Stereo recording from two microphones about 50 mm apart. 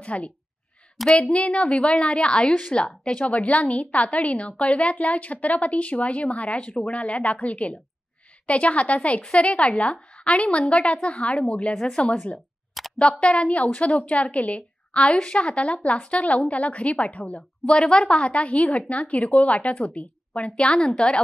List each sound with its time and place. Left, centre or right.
0.0 s a woman's voice: left
1.0 s a woman's voice: centre
1.3 s a woman's voice: left
12.8 s a sound: centre
13.2 s a woman's voice: left
20.6 s a woman's voice: centre